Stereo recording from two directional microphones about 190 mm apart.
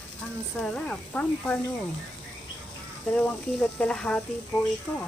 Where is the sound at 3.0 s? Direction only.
5° left (ahead or behind).